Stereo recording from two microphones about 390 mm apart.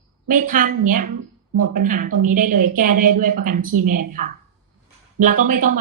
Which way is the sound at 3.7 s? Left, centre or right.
Right.